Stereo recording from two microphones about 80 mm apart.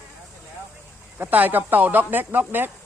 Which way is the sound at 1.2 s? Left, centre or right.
Right.